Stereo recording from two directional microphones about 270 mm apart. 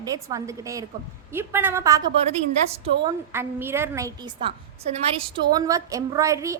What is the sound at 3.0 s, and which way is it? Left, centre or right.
A woman's voice, centre.